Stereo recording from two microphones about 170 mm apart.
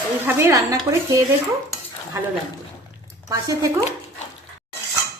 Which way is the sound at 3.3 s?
20° right (ahead or behind).